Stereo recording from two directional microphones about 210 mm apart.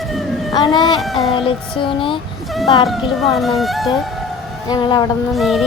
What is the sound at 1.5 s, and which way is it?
Speech, 25° left (ahead or behind).